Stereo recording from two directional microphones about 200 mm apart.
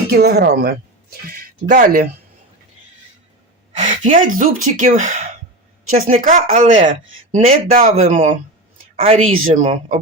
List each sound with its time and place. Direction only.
0.1 s speech: 50° right (ahead or behind)
3.8 s a sound: 40° right (ahead or behind)
4.4 s speech: 40° right (ahead or behind)